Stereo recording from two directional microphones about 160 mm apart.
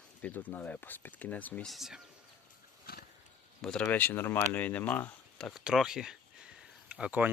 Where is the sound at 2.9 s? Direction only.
70° left (ahead or behind).